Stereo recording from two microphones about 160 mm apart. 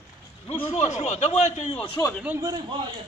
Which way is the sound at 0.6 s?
40° left (ahead or behind).